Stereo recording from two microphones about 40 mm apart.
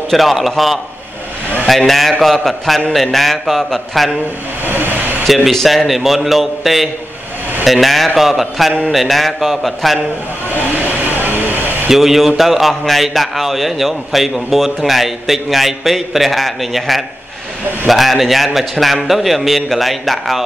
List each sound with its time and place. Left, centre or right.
0.1 s a man's voice: centre
1.9 s a man's voice: centre
4.6 s vehicle: right
5.2 s speech: centre
5.5 s speech: centre
5.9 s a man's voice: centre
10.7 s vehicle: right
11.4 s a sound: right
11.9 s a man's voice: centre